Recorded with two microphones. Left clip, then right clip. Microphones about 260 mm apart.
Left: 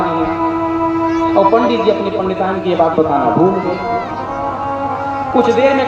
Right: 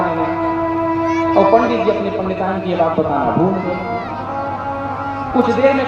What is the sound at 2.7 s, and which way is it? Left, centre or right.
Speech, left.